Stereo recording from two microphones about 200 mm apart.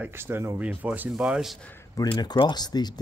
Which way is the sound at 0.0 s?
10° right (ahead or behind).